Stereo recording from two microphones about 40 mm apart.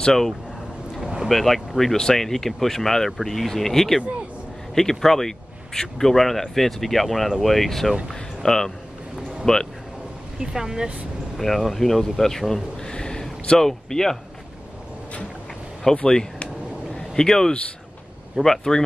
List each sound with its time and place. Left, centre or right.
0.0 s speech: centre
1.0 s a sound: centre
1.3 s speech: centre
10.4 s speech: centre
11.3 s speech: centre
12.9 s a sound: centre
15.9 s speech: centre
16.9 s a sound: centre
18.4 s speech: centre